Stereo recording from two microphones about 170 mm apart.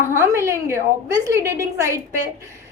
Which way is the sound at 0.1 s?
15° right (ahead or behind).